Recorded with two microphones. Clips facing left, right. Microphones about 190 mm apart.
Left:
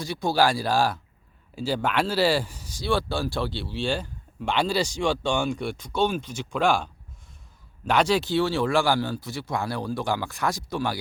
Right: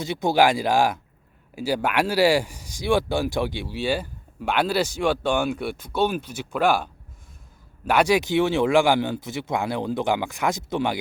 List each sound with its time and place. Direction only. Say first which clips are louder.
0.0 s speech: right 3 dB; 20° right (ahead or behind)